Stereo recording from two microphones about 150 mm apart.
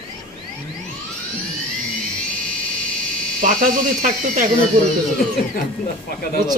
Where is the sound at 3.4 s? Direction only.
65° right (ahead or behind).